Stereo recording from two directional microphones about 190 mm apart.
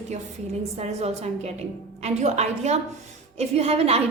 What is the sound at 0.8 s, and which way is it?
A woman's voice, 35° right (ahead or behind).